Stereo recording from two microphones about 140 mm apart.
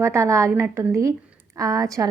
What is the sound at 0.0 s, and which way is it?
A woman's voice, 20° right (ahead or behind).